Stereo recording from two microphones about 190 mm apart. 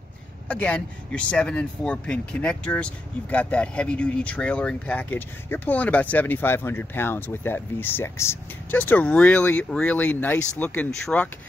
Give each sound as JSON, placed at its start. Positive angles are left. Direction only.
{"t": 0.5, "sound": "speech", "side_deg": 5}